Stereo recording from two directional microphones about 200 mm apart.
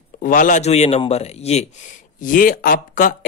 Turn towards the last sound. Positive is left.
turn(degrees=40)  # may be behind; listen again after turning